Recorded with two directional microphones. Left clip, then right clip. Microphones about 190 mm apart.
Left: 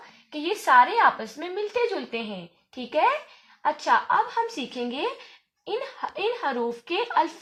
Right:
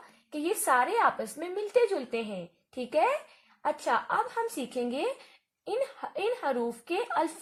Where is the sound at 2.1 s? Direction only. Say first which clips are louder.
Left 1 dB; 50° right (ahead or behind).